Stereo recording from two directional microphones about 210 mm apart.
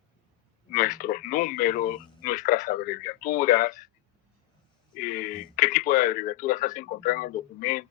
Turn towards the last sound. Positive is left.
turn(degrees=40)  # may be behind; listen again after turning